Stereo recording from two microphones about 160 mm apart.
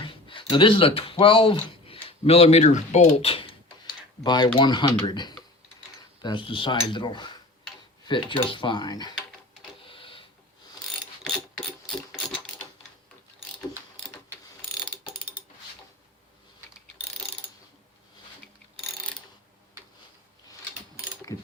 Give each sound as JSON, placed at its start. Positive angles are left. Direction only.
{"t": 0.0, "sound": "speech", "side_deg": 30}
{"t": 9.8, "sound": "printer", "side_deg": 35}
{"t": 21.3, "sound": "ratchet", "side_deg": 20}